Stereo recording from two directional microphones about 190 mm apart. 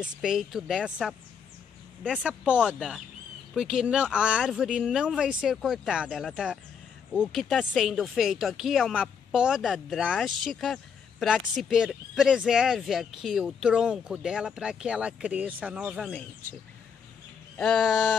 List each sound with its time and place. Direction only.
0.0 s speech: 5° right (ahead or behind)
16.1 s speech: 10° left (ahead or behind)
17.6 s speech: 5° left (ahead or behind)